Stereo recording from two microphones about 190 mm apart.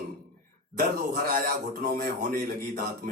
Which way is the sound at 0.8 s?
55° right (ahead or behind).